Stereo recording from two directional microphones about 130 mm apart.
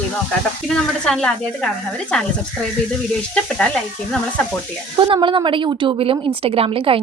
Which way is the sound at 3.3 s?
5° left (ahead or behind).